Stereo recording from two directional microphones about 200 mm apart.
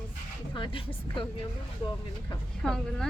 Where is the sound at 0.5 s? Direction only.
25° left (ahead or behind).